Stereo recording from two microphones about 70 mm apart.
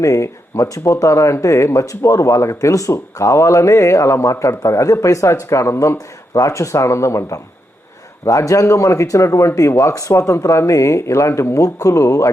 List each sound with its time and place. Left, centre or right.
0.0 s speech: left